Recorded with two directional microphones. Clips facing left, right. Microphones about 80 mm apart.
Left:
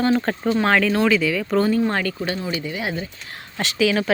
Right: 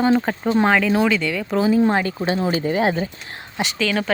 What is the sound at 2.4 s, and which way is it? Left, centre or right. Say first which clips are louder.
Speech: right 7 dB; right.